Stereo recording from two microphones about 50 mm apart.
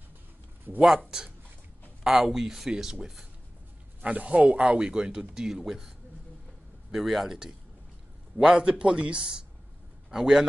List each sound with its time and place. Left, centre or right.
0.8 s speech: centre
4.0 s speech: right; by 7.3 s centre
8.4 s speech: centre